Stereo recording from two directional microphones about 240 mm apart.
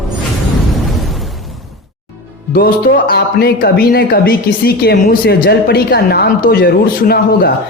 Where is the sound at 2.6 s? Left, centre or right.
Left.